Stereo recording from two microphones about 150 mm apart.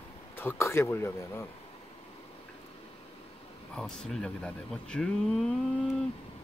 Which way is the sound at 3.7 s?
5° left (ahead or behind).